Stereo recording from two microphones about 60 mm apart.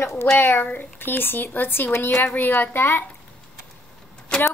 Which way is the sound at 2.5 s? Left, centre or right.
Left.